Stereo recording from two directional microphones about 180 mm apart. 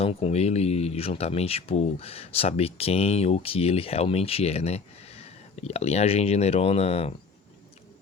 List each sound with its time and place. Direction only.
0.0 s speech: 35° left (ahead or behind)